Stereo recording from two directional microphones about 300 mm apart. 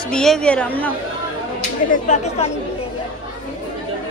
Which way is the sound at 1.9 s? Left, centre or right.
Left.